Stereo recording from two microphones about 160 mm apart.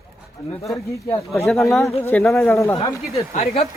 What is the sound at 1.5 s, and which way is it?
Speech, centre (ahead or behind).